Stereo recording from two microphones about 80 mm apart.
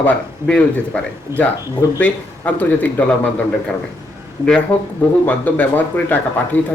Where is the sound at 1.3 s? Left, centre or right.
Right.